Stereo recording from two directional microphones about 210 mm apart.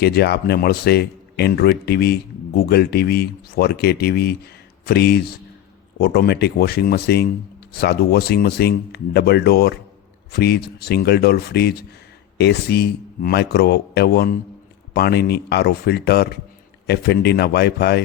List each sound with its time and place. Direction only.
0.0 s speech: 50° left (ahead or behind)